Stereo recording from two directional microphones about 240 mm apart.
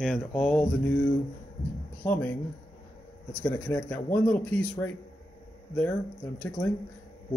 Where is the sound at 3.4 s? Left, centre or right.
Centre.